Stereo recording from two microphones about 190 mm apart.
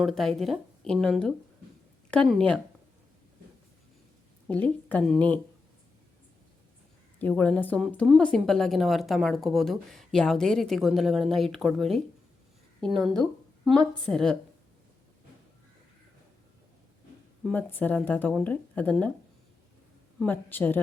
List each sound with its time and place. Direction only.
0.0 s a woman's voice: centre (ahead or behind)
4.4 s speech: 5° left (ahead or behind)
7.2 s a woman's voice: 10° left (ahead or behind)
14.1 s a woman's voice: 5° left (ahead or behind)
17.4 s speech: 10° left (ahead or behind)
20.1 s speech: 10° left (ahead or behind)